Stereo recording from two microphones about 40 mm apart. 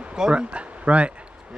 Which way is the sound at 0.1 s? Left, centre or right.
Right.